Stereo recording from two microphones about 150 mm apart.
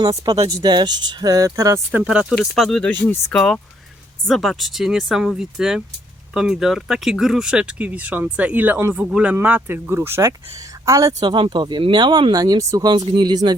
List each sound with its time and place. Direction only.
0.0 s speech: 20° right (ahead or behind)
2.4 s speech: centre (ahead or behind); by 13.6 s 30° right (ahead or behind)